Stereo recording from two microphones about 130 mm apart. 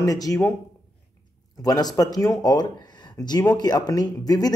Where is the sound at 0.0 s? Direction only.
25° left (ahead or behind).